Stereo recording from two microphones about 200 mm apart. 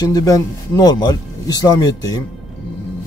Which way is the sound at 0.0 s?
15° left (ahead or behind).